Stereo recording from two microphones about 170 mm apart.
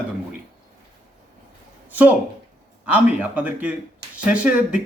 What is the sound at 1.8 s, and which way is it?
Speech, 10° right (ahead or behind).